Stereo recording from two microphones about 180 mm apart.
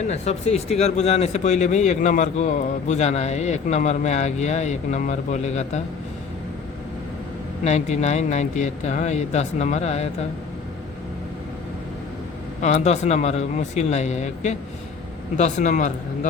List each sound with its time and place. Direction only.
0.1 s speech: 35° left (ahead or behind)
7.6 s speech: 40° left (ahead or behind)
12.6 s speech: 40° left (ahead or behind)